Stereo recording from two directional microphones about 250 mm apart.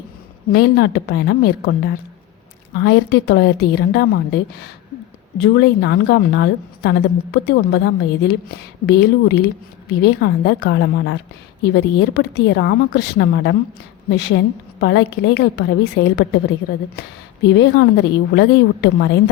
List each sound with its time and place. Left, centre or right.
0.5 s a woman's voice: left
2.8 s a woman's voice: left
5.4 s a woman's voice: left
17.4 s a woman's voice: left